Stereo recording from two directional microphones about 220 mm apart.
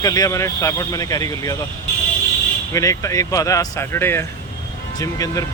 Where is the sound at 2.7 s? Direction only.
15° left (ahead or behind).